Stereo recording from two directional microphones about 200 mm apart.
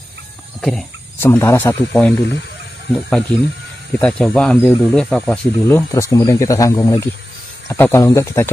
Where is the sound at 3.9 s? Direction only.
5° left (ahead or behind).